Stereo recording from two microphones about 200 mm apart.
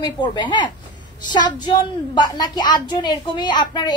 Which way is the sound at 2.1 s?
20° left (ahead or behind).